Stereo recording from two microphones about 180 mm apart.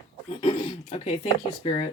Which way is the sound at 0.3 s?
30° left (ahead or behind).